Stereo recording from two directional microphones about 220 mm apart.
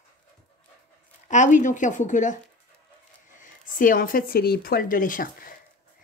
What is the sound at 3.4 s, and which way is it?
Speech, 40° left (ahead or behind).